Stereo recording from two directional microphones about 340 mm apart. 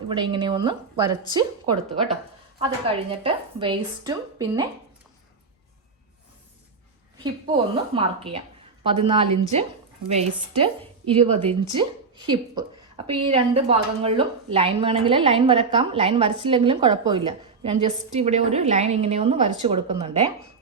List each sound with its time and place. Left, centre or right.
0.1 s a woman's voice: centre
7.2 s a woman's voice: centre
11.7 s a woman's voice: centre